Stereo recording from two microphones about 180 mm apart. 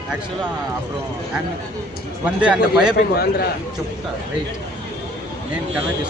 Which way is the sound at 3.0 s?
60° left (ahead or behind).